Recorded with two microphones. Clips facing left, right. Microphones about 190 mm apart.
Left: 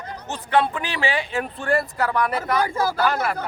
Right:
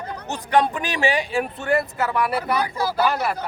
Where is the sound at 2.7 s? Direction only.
50° left (ahead or behind).